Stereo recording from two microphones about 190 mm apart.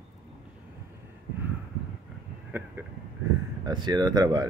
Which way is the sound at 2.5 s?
15° right (ahead or behind).